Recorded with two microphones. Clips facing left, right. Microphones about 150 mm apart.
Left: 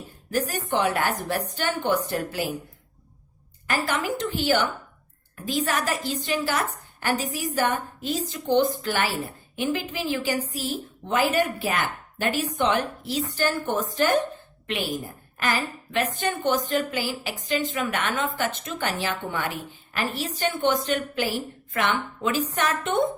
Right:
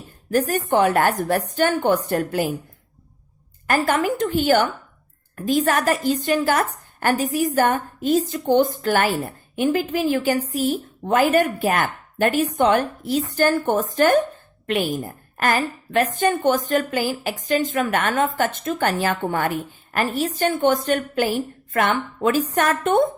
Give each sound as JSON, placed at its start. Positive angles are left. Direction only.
{"t": 0.3, "sound": "a woman's voice", "side_deg": -50}
{"t": 3.7, "sound": "a woman's voice", "side_deg": -50}